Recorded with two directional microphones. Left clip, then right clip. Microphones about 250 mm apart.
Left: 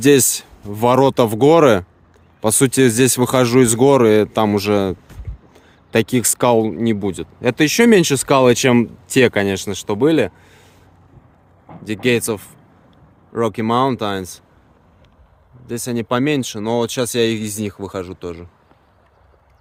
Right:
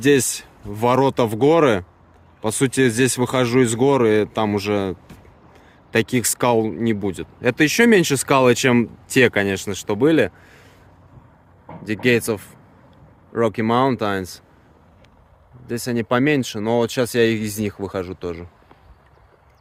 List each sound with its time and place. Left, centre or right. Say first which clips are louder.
0.0 s speech: left 4 dB; left
11.8 s speech: left 1 dB; centre
15.6 s speech: left 1 dB; centre